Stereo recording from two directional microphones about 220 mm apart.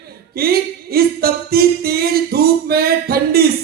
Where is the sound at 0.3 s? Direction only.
45° right (ahead or behind).